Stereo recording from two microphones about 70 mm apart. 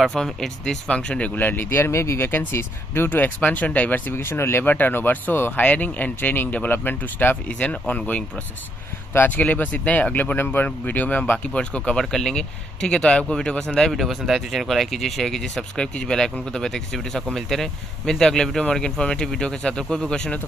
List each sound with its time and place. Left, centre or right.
0.0 s speech: centre
1.3 s speech: left
13.9 s speech: centre